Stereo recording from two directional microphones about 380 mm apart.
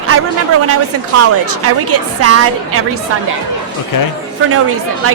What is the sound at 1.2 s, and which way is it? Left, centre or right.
Speech, right.